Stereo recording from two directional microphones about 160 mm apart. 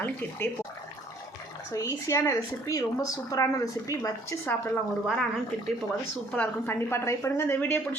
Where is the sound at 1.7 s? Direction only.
20° left (ahead or behind).